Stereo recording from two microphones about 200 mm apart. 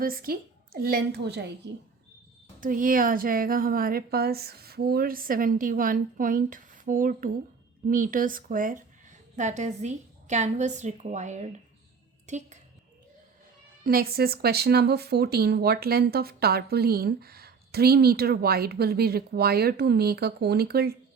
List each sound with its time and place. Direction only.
0.0 s speech: 45° right (ahead or behind)
2.6 s a woman's voice: 45° right (ahead or behind)
13.8 s speech: 50° right (ahead or behind)